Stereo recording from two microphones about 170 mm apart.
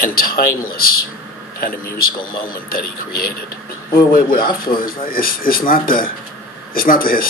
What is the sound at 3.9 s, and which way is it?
Speech, 60° left (ahead or behind).